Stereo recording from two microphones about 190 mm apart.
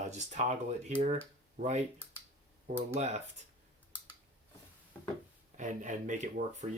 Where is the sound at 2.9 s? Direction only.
35° right (ahead or behind).